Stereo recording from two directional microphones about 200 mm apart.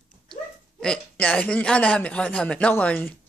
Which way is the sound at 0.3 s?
5° left (ahead or behind).